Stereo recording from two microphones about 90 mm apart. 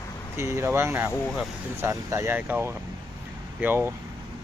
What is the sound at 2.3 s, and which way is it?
Speech, 20° right (ahead or behind).